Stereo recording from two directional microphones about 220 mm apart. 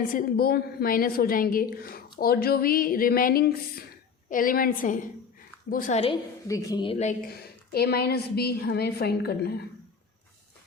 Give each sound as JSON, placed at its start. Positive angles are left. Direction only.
{"t": 0.1, "sound": "a woman's voice", "side_deg": 40}
{"t": 6.5, "sound": "speech", "side_deg": 15}
{"t": 7.7, "sound": "a woman's voice", "side_deg": 45}